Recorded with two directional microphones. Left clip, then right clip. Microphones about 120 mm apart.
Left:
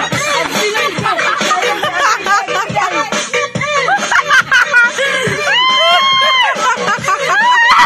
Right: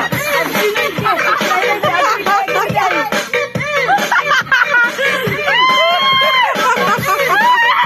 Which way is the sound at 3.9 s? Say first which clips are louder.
Left 2 dB; 80° left.